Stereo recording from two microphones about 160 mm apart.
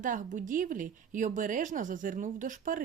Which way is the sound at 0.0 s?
55° right (ahead or behind).